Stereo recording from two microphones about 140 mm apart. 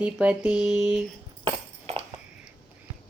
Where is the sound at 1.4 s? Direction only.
40° right (ahead or behind).